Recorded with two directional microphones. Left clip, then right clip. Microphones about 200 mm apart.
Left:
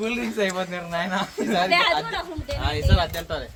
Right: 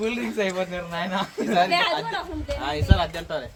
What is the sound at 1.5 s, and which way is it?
Speech, 10° right (ahead or behind).